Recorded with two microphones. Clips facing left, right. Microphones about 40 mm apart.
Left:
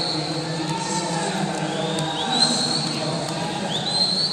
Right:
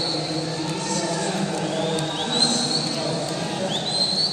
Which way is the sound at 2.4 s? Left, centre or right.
Left.